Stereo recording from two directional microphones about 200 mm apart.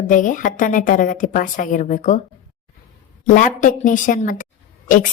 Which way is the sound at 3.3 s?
40° left (ahead or behind).